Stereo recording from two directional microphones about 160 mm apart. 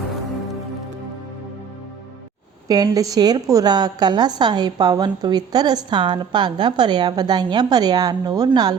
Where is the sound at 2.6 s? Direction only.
25° right (ahead or behind).